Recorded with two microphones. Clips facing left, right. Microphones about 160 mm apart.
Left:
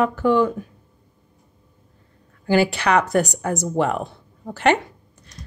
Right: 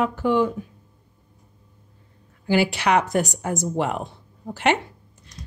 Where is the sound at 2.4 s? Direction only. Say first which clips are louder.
Left 2 dB; 50° left (ahead or behind).